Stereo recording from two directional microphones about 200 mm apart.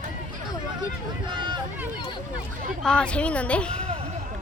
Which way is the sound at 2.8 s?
5° left (ahead or behind).